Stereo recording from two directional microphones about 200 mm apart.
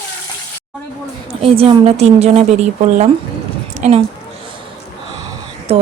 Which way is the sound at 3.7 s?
35° right (ahead or behind).